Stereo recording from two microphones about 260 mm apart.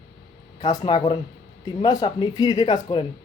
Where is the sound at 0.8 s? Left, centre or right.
Centre.